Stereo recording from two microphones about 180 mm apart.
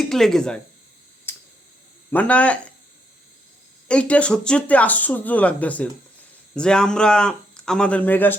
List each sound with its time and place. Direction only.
0.1 s speech: centre (ahead or behind)
1.3 s a sound: 10° left (ahead or behind)
2.0 s speech: 10° left (ahead or behind)
3.8 s speech: 5° left (ahead or behind)